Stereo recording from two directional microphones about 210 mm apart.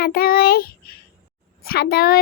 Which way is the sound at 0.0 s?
45° left (ahead or behind).